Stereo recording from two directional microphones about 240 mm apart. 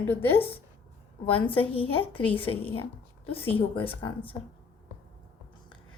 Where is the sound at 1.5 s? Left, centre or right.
Left.